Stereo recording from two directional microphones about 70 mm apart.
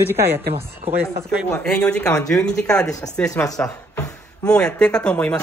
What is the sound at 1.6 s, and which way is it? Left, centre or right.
Speech, centre.